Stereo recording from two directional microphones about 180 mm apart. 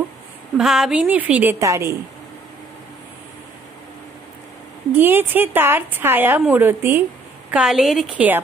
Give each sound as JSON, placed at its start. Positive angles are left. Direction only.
{"t": 0.6, "sound": "a woman's voice", "side_deg": -5}
{"t": 4.9, "sound": "a woman's voice", "side_deg": -10}